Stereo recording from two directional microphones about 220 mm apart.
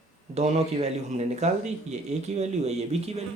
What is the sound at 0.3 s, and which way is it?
A man's voice, 30° right (ahead or behind).